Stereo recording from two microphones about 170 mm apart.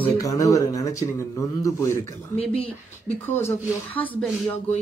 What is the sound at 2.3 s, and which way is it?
Speech, 35° left (ahead or behind).